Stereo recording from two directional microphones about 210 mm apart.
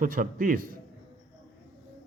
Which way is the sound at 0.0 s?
40° right (ahead or behind).